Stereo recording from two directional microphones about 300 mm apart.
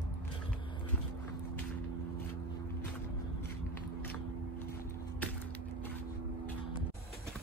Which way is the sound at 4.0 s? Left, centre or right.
Centre.